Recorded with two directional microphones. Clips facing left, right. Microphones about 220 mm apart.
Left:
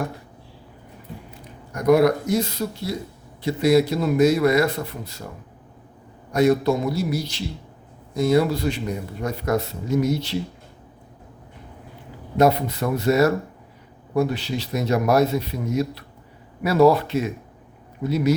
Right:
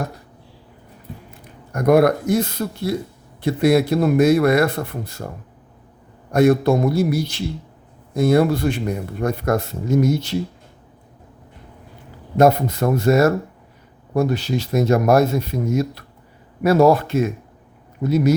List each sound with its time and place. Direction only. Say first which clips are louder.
1.7 s a man's voice: right 2 dB; 55° right (ahead or behind)
6.3 s speech: right 3 dB; 55° right (ahead or behind)
12.4 s speech: right 3 dB; 45° right (ahead or behind)